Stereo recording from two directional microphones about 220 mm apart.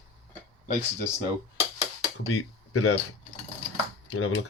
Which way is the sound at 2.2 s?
75° left (ahead or behind).